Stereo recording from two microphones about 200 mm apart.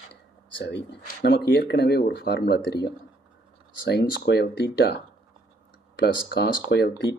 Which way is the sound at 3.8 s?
55° left (ahead or behind).